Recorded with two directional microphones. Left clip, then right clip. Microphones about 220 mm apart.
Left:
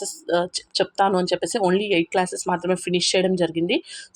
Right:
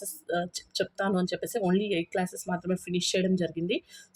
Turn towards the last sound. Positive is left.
turn(degrees=15)  # may be behind; listen again after turning